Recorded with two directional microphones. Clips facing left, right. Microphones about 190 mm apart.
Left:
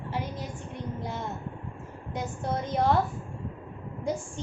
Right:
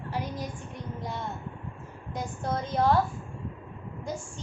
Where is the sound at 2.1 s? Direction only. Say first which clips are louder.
Even; 20° left (ahead or behind).